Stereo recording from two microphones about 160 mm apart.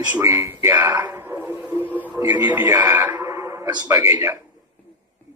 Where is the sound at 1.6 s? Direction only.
10° right (ahead or behind).